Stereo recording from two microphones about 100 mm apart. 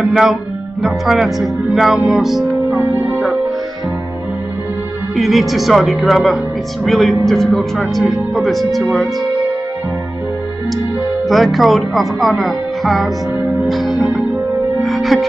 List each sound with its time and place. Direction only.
0.0 s speech: centre (ahead or behind)
2.8 s music: 25° right (ahead or behind)
5.1 s speech: centre (ahead or behind)
11.2 s speech: centre (ahead or behind)
13.7 s music: centre (ahead or behind)
14.8 s speech: centre (ahead or behind)